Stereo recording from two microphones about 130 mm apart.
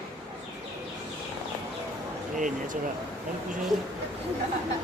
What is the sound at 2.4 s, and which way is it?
Speech, 90° right.